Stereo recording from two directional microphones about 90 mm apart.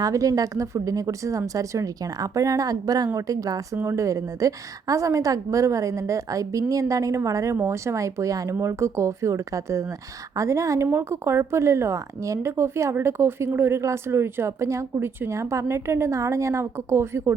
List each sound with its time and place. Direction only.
0.0 s a woman's voice: 40° right (ahead or behind)